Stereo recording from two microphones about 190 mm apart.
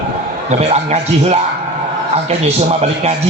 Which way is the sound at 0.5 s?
35° right (ahead or behind).